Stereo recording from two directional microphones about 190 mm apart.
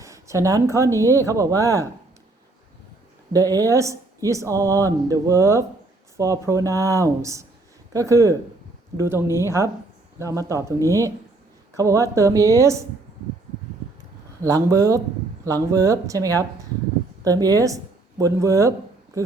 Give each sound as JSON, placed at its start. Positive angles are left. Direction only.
{"t": 0.0, "sound": "speech", "side_deg": -15}
{"t": 3.4, "sound": "speech", "side_deg": 10}
{"t": 3.7, "sound": "speech", "side_deg": -15}
{"t": 14.4, "sound": "speech", "side_deg": -15}
{"t": 19.2, "sound": "a sound", "side_deg": -15}